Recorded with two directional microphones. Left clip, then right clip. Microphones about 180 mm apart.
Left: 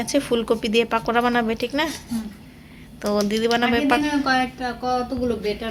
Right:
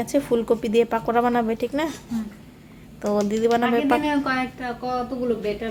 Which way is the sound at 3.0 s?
10° right (ahead or behind).